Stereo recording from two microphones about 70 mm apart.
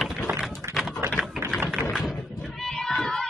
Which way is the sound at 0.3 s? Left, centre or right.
Centre.